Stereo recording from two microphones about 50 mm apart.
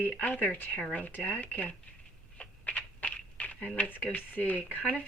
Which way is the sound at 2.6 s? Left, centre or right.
Left.